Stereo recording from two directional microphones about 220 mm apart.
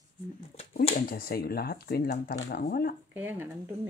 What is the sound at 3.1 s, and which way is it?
Speech, 10° right (ahead or behind).